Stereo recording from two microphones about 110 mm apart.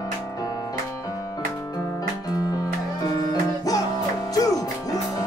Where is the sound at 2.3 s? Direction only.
30° left (ahead or behind).